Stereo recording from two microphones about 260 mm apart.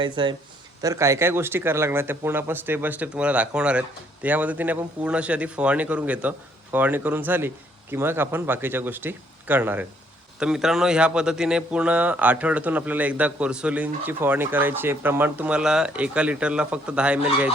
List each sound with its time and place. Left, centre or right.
0.0 s speech: centre